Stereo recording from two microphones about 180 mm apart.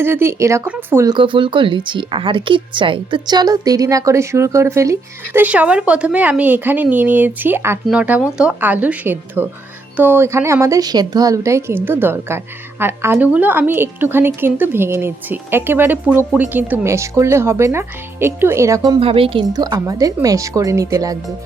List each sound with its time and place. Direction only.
0.0 s speech: 15° right (ahead or behind)
1.1 s speech: 30° right (ahead or behind)
18.9 s speech: 30° right (ahead or behind)